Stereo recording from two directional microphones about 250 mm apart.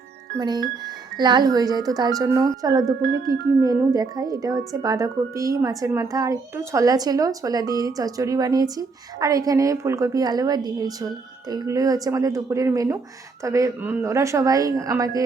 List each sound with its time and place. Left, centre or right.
0.3 s a woman's voice: centre